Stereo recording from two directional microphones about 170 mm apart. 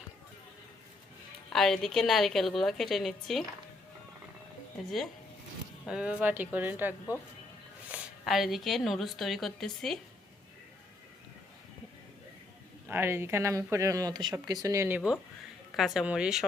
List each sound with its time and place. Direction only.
1.5 s a woman's voice: centre (ahead or behind)
5.9 s a woman's voice: 5° right (ahead or behind)
12.9 s a woman's voice: 15° right (ahead or behind)